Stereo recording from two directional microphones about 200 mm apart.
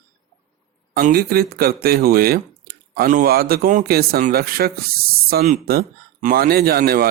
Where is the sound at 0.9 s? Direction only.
50° right (ahead or behind).